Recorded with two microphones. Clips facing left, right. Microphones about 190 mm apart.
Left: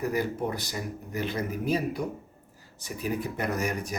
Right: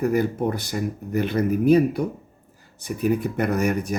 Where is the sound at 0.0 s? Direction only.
55° right (ahead or behind).